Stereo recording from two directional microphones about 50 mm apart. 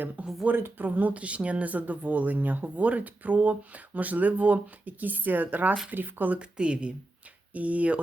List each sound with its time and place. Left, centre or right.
0.2 s speech: right
0.5 s speech: right
0.9 s speech: right
6.4 s speech: right